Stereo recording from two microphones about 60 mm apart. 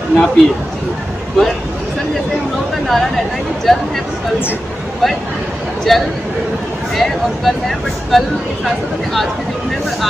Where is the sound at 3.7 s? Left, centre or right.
Centre.